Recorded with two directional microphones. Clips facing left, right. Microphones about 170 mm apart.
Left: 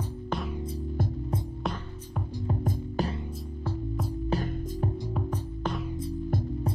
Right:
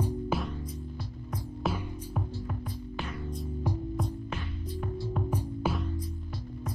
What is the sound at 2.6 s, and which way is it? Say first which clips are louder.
Music: left 8 dB; 40° left (ahead or behind).